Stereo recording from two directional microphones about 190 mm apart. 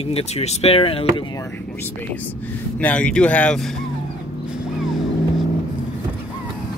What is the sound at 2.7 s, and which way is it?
Speech, 5° left (ahead or behind).